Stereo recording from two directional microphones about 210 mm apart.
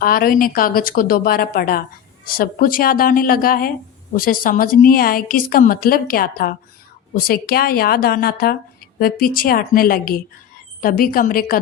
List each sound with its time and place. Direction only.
0.0 s a woman's voice: 45° left (ahead or behind)